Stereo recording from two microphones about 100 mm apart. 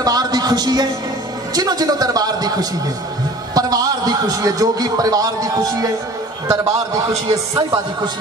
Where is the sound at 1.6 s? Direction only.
40° right (ahead or behind).